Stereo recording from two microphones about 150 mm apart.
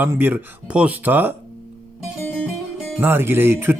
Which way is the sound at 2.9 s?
15° right (ahead or behind).